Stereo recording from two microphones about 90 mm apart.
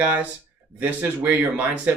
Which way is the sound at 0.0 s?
15° right (ahead or behind).